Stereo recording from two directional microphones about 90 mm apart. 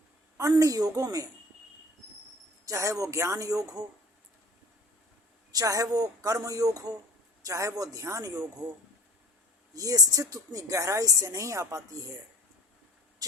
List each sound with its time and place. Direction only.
0.3 s speech: 40° right (ahead or behind)
2.6 s speech: 35° right (ahead or behind)
5.5 s speech: 40° right (ahead or behind)
9.7 s speech: 40° right (ahead or behind)